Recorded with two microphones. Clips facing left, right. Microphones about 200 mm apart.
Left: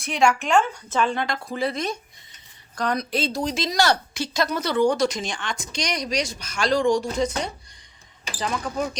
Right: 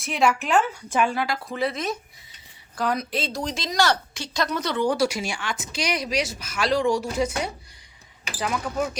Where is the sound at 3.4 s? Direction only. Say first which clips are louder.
Even; 10° left (ahead or behind).